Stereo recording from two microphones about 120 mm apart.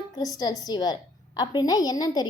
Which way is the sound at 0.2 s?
30° left (ahead or behind).